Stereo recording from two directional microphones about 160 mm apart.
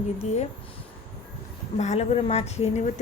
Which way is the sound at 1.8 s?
45° left (ahead or behind).